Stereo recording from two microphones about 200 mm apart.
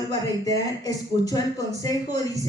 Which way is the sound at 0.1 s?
15° left (ahead or behind).